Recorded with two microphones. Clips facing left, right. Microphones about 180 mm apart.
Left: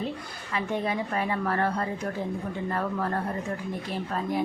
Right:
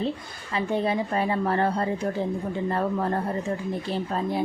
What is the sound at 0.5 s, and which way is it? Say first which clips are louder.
Speech: right 4 dB; 30° right (ahead or behind).